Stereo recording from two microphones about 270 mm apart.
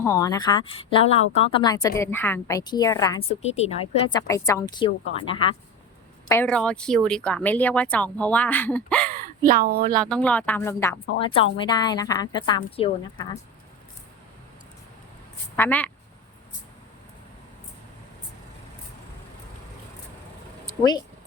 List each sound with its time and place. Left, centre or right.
0.0 s speech: centre
6.2 s speech: centre
9.4 s speech: right
10.0 s speech: centre
15.5 s speech: centre
20.7 s a sound: centre